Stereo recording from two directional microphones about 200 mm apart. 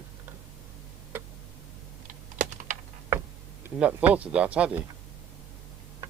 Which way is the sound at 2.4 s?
40° right (ahead or behind).